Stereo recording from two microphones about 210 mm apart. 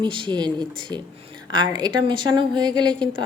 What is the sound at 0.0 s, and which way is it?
A woman's voice, 25° right (ahead or behind).